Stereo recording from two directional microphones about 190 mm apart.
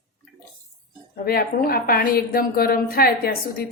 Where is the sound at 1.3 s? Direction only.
50° left (ahead or behind).